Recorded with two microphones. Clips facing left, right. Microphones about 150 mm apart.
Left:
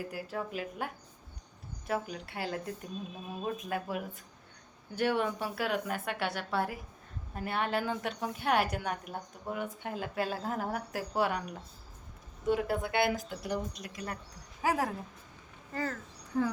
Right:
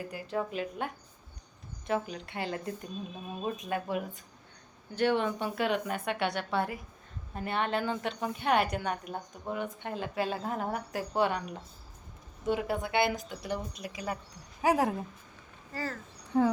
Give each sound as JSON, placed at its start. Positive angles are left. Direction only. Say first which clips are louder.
{"t": 0.0, "sound": "a woman's voice", "louder": "right 3 dB", "side_deg": 5}
{"t": 1.9, "sound": "a woman's voice", "louder": "right 2 dB", "side_deg": 5}
{"t": 12.5, "sound": "a woman's voice", "louder": "even", "side_deg": 0}
{"t": 14.6, "sound": "speech", "louder": "right 4 dB", "side_deg": -20}